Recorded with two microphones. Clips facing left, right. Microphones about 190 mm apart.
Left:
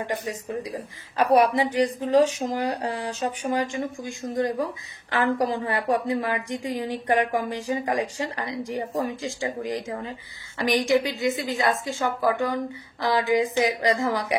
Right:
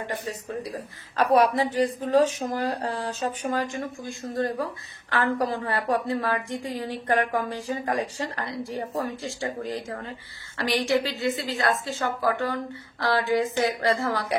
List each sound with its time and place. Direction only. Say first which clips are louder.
0.2 s a woman's voice: left 2 dB; 15° left (ahead or behind)